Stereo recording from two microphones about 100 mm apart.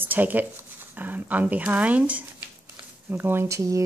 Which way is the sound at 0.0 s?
15° right (ahead or behind).